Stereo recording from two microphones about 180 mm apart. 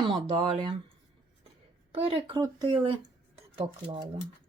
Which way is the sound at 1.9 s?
30° right (ahead or behind).